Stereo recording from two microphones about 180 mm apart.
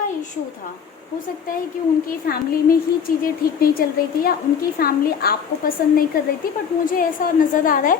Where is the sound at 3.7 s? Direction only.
55° left (ahead or behind).